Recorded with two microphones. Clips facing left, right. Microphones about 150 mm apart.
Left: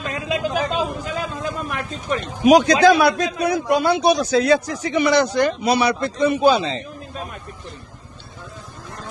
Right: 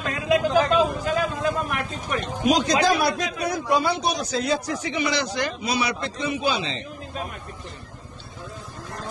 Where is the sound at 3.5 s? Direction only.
60° left (ahead or behind); by 4.6 s 80° left.